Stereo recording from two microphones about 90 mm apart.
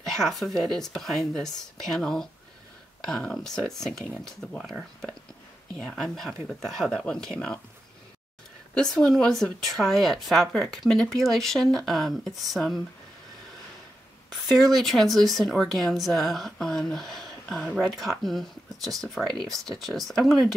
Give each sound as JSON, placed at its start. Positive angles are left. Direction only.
{"t": 0.1, "sound": "speech", "side_deg": 0}
{"t": 8.9, "sound": "speech", "side_deg": 5}
{"t": 14.7, "sound": "speech", "side_deg": 0}